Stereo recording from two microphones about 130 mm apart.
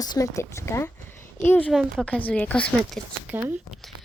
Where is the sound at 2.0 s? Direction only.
10° left (ahead or behind).